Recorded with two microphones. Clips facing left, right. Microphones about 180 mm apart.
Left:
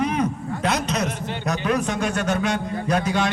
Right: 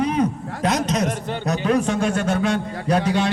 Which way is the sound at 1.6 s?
30° right (ahead or behind).